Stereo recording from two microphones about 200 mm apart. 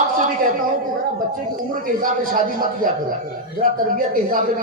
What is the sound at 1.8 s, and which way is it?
A man's voice, 45° right (ahead or behind).